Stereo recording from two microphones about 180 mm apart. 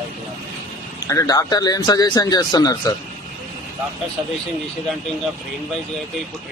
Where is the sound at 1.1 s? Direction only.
20° left (ahead or behind).